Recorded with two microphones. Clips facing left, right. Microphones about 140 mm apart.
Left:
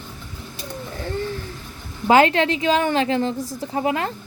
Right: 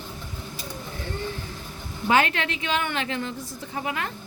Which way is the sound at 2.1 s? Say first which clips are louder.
Left 7 dB; 30° left (ahead or behind).